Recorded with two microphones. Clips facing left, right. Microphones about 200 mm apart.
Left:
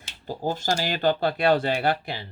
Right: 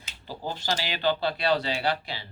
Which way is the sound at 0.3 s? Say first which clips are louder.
Left 5 dB; 45° left (ahead or behind).